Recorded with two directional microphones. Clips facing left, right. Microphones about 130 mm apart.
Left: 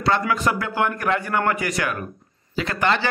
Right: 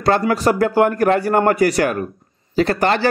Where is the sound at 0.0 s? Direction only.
40° right (ahead or behind).